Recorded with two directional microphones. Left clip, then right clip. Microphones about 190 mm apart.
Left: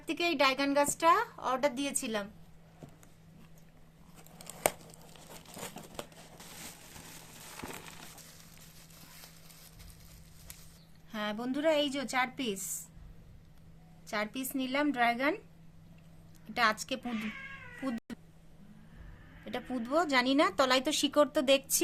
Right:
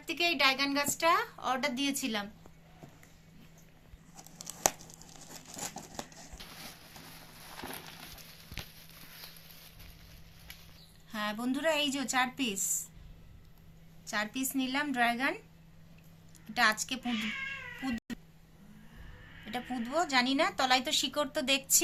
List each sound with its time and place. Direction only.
0.0 s speech: 60° left (ahead or behind)
11.1 s a woman's voice: 35° left (ahead or behind)
14.1 s speech: 45° left (ahead or behind)
16.6 s speech: 50° left (ahead or behind)
17.8 s cat: 50° left (ahead or behind)
19.5 s speech: 50° left (ahead or behind)